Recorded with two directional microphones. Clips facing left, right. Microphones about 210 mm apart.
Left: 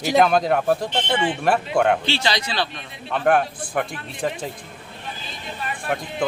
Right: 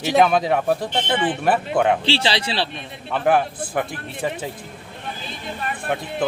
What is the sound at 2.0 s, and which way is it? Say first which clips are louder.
Speech: right 2 dB; 30° right (ahead or behind).